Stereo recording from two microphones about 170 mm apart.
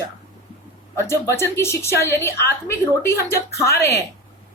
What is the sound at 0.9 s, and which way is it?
A woman's voice, 15° left (ahead or behind).